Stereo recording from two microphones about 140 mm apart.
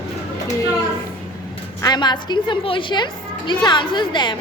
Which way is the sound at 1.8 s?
30° left (ahead or behind).